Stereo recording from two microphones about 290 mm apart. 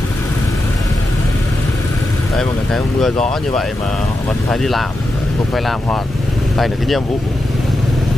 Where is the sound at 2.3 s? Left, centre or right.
Centre.